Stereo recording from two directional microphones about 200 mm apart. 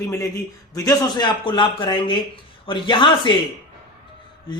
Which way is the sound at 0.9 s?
20° left (ahead or behind).